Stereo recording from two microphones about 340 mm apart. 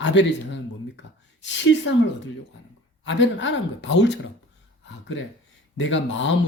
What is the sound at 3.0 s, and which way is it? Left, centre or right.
Speech, left.